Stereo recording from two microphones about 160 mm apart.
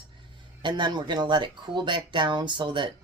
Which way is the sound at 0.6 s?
30° right (ahead or behind).